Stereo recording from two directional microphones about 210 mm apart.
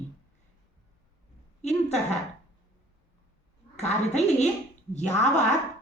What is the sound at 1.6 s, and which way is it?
Speech, 30° left (ahead or behind).